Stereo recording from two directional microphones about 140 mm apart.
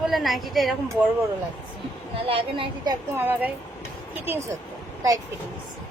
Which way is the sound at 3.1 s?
15° right (ahead or behind).